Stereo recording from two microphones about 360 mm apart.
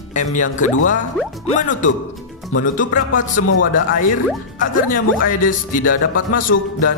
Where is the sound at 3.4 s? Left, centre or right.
Left.